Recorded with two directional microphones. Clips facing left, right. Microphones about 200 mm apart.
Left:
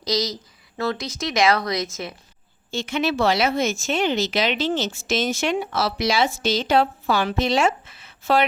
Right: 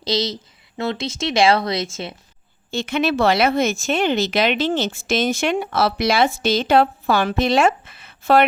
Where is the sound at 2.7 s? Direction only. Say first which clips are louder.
Right 3 dB; 60° right (ahead or behind).